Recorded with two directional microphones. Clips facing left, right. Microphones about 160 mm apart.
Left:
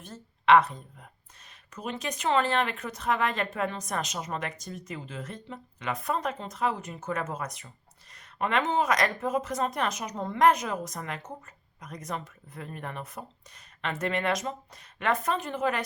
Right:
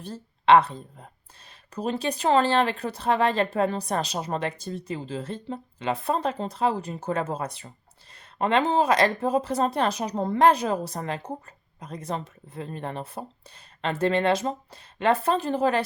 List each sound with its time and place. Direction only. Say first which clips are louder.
0.0 s speech: right 3 dB; 30° right (ahead or behind)